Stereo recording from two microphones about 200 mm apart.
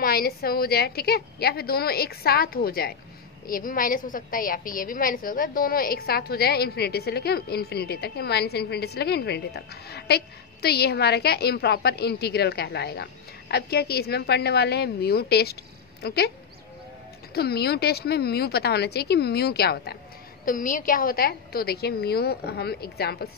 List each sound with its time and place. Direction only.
0.0 s a woman's voice: 50° left (ahead or behind)
17.3 s a woman's voice: 50° left (ahead or behind)